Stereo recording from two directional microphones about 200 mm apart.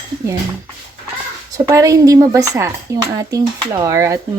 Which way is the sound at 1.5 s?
15° right (ahead or behind).